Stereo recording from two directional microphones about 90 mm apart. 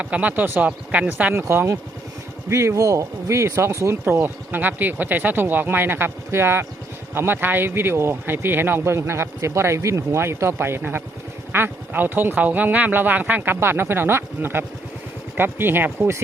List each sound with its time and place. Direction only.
0.0 s speech: 15° right (ahead or behind)